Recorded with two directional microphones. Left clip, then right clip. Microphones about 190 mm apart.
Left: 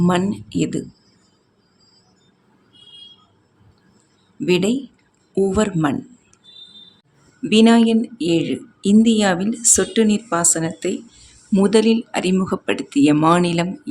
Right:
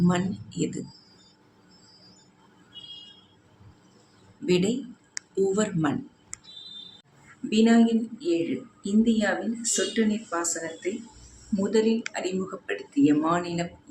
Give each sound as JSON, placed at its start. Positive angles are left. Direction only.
{"t": 0.1, "sound": "speech", "side_deg": 50}
{"t": 4.4, "sound": "speech", "side_deg": 50}
{"t": 7.5, "sound": "speech", "side_deg": 60}